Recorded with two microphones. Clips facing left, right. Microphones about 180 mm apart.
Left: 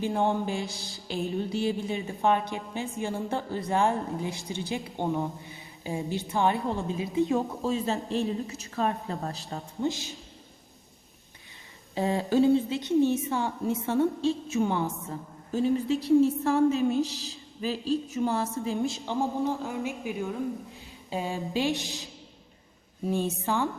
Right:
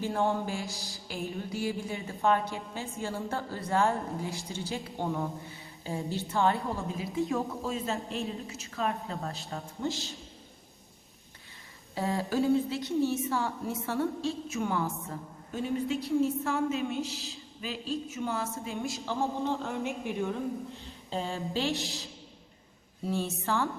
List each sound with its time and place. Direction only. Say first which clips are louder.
0.0 s a woman's voice: left 3 dB; 15° left (ahead or behind)
7.6 s a woman's voice: left 5 dB; 35° left (ahead or behind)
9.8 s a woman's voice: left 4 dB; 15° left (ahead or behind)
11.9 s a woman's voice: left 5 dB; 20° left (ahead or behind)
14.5 s speech: left 4 dB; 30° left (ahead or behind)
15.5 s a woman's voice: left 5 dB; 35° left (ahead or behind)
18.9 s a woman's voice: left 3 dB; 15° left (ahead or behind)
19.6 s speech: left 1 dB; centre (ahead or behind)
20.8 s a woman's voice: left 5 dB; 15° left (ahead or behind)